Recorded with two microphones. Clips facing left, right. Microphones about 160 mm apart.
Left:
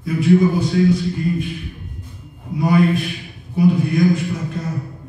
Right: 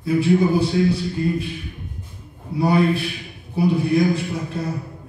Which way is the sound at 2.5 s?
30° right (ahead or behind).